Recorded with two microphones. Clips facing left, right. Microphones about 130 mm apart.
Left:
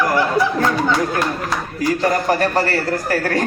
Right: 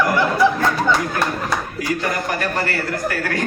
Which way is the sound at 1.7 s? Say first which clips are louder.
Left 5 dB; 35° left (ahead or behind).